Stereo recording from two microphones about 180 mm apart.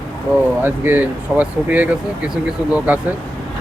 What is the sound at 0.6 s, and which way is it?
Speech, 10° right (ahead or behind).